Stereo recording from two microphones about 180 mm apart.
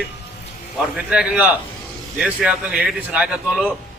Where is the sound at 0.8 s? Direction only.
5° right (ahead or behind).